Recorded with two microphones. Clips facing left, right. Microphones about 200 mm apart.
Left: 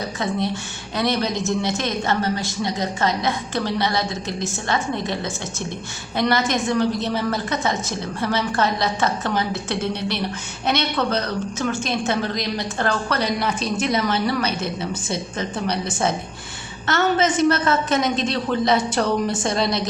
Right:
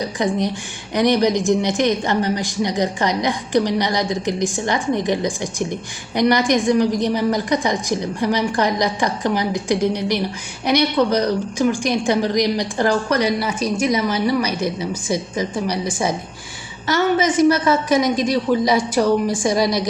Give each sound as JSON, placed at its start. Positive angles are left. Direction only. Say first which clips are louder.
{"t": 0.2, "sound": "a woman's voice", "louder": "right 3 dB", "side_deg": -15}